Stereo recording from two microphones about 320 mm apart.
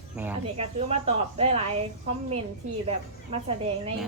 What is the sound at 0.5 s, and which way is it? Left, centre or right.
Speech, centre.